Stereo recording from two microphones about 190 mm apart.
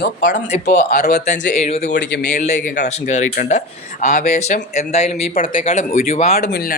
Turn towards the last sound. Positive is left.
turn(degrees=35)  # may be behind; listen again after turning